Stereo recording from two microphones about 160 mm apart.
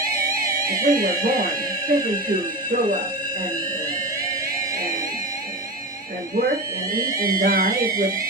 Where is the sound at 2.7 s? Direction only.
55° right (ahead or behind).